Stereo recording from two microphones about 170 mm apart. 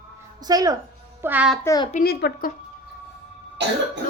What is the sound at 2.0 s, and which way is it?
Speech, 70° left (ahead or behind).